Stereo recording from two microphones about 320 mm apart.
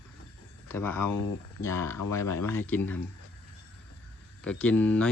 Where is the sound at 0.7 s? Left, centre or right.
Centre.